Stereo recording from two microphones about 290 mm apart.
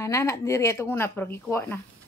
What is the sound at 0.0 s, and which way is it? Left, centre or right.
Speech, centre.